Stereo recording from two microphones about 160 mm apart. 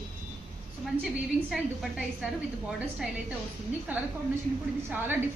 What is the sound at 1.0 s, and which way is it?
A woman's voice, centre (ahead or behind).